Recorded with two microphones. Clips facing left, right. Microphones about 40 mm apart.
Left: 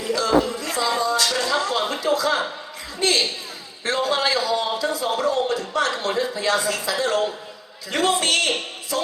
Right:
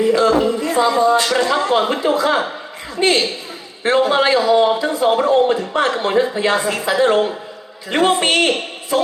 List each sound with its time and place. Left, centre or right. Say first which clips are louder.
0.0 s a man's voice: right 6 dB; right